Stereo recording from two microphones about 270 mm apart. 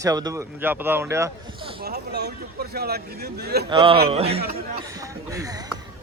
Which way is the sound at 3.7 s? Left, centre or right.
Centre.